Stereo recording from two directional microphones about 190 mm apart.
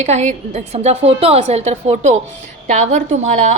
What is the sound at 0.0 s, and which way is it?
A woman's voice, 35° right (ahead or behind).